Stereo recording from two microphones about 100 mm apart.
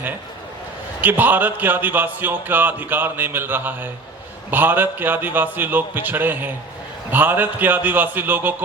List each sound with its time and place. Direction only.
1.0 s a man's voice: 20° right (ahead or behind)